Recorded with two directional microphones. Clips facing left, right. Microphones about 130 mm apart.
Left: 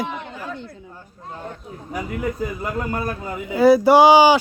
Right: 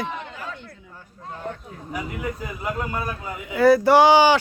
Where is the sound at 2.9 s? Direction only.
40° left (ahead or behind).